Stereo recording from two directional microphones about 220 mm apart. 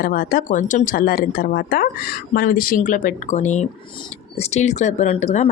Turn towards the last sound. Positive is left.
turn(degrees=30)  # may be behind; listen again after turning